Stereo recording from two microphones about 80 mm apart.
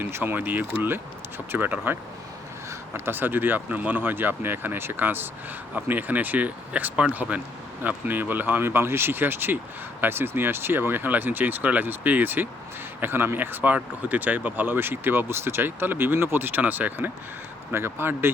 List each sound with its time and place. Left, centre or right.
0.0 s speech: right